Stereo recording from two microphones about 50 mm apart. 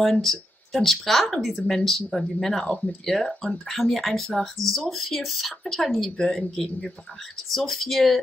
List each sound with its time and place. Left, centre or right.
0.0 s speech: centre
3.7 s speech: centre